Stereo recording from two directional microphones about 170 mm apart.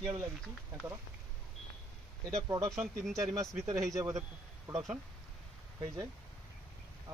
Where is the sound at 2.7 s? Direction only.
Centre (ahead or behind).